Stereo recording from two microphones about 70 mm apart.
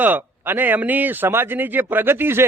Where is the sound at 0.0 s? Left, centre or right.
Right.